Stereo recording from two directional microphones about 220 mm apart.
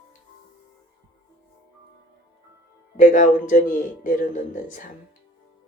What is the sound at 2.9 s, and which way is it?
Speech, 35° left (ahead or behind).